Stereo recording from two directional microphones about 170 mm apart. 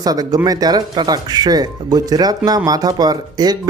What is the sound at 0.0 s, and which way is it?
Speech, 20° right (ahead or behind).